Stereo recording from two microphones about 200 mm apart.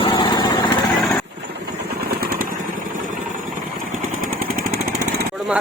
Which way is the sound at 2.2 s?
45° right (ahead or behind).